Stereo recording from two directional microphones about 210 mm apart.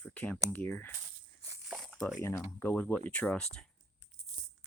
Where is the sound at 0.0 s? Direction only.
5° left (ahead or behind).